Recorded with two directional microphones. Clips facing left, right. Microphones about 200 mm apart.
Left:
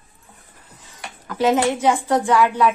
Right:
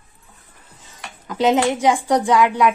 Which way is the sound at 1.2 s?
20° right (ahead or behind).